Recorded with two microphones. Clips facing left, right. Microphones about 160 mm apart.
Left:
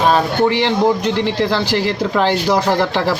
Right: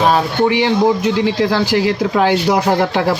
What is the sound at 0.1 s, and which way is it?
A man's voice, 10° right (ahead or behind).